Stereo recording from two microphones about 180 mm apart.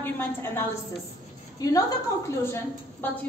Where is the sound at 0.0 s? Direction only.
10° left (ahead or behind).